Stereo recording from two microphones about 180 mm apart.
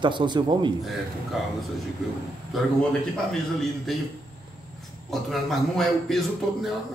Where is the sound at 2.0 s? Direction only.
Centre (ahead or behind).